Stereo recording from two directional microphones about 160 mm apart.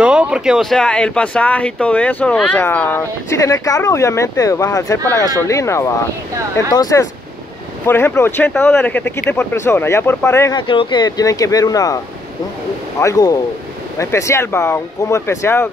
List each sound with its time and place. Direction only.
0.0 s speech: 5° right (ahead or behind); by 10.5 s 15° left (ahead or behind)
10.5 s speech: 30° left (ahead or behind)
13.0 s speech: 20° left (ahead or behind)